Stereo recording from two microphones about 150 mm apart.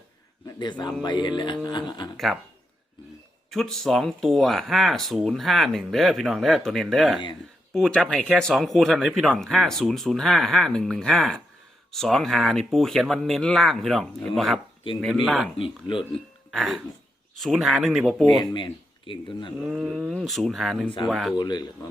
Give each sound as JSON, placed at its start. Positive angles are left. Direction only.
{"t": 0.4, "sound": "a man's voice", "side_deg": 30}
{"t": 2.1, "sound": "speech", "side_deg": 0}
{"t": 3.5, "sound": "speech", "side_deg": 0}
{"t": 15.5, "sound": "speech", "side_deg": 35}
{"t": 16.5, "sound": "a sound", "side_deg": 0}
{"t": 17.4, "sound": "speech", "side_deg": 0}
{"t": 18.5, "sound": "speech", "side_deg": 35}
{"t": 19.6, "sound": "speech", "side_deg": -5}
{"t": 21.3, "sound": "speech", "side_deg": 30}